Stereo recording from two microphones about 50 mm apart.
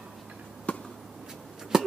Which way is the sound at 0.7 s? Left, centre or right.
Left.